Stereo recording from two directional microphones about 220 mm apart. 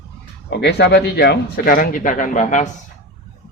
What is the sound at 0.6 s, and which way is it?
Speech, 50° left (ahead or behind).